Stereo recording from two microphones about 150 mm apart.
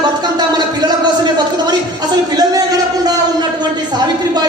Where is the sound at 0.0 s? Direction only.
25° right (ahead or behind).